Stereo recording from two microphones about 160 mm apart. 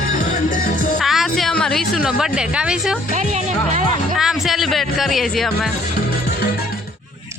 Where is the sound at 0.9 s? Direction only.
Centre (ahead or behind).